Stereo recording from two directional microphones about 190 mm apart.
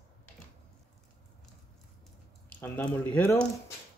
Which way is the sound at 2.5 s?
10° left (ahead or behind).